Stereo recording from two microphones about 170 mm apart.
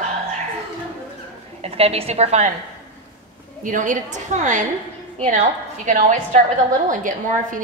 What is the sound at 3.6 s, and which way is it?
A woman's voice, 50° right (ahead or behind).